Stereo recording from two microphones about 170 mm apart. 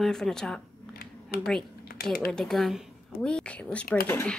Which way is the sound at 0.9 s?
60° left (ahead or behind).